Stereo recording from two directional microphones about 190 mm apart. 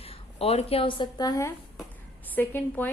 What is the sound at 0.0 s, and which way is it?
A woman's voice, 30° left (ahead or behind).